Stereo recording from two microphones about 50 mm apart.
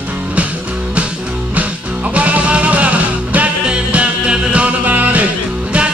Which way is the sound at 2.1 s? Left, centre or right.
Right.